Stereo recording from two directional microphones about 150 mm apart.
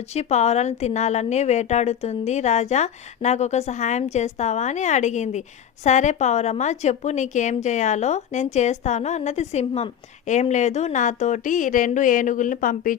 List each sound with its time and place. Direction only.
0.1 s a woman's voice: 45° left (ahead or behind); by 13.0 s 65° left (ahead or behind)